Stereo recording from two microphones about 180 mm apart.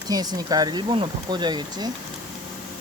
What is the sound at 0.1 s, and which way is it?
Speech, 20° right (ahead or behind).